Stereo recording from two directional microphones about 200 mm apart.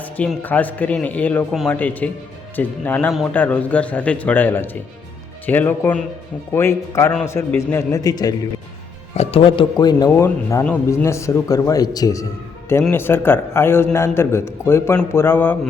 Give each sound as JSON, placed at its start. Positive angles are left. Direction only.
{"t": 0.0, "sound": "a man's voice", "side_deg": 5}
{"t": 9.1, "sound": "speech", "side_deg": 30}
{"t": 10.2, "sound": "a man's voice", "side_deg": 10}